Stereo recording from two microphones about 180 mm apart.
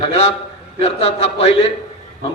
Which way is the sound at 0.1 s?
35° left (ahead or behind).